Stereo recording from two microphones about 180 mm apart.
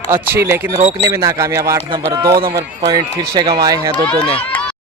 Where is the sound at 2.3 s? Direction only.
60° right (ahead or behind).